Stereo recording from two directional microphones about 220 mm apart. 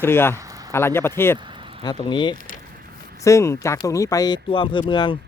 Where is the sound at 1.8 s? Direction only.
20° left (ahead or behind).